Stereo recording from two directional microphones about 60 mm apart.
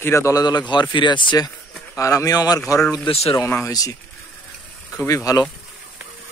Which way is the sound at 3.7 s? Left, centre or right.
Left.